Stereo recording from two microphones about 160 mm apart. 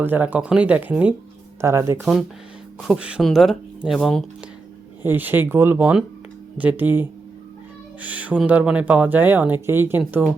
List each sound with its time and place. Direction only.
0.0 s speech: 10° right (ahead or behind)
2.0 s speech: centre (ahead or behind)
5.0 s speech: 10° right (ahead or behind)